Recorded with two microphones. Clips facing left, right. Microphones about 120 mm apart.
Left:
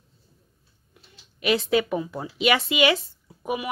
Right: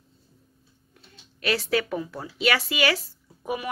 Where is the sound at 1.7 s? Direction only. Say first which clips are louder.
Left 3 dB; 20° left (ahead or behind).